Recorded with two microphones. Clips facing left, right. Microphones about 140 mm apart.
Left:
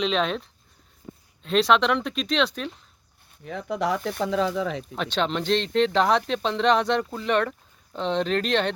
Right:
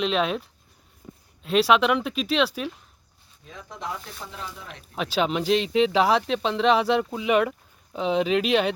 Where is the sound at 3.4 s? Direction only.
70° left (ahead or behind); by 4.8 s 90° left.